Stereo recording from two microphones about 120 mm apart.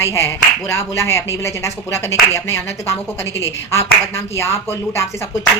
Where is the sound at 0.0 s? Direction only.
20° left (ahead or behind).